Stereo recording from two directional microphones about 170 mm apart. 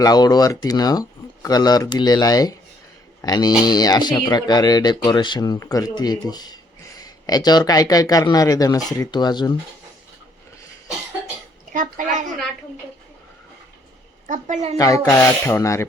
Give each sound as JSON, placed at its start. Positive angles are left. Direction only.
{"t": 0.0, "sound": "speech", "side_deg": 25}
{"t": 11.7, "sound": "a woman's voice", "side_deg": -50}
{"t": 14.3, "sound": "a woman's voice", "side_deg": -45}
{"t": 14.8, "sound": "speech", "side_deg": 20}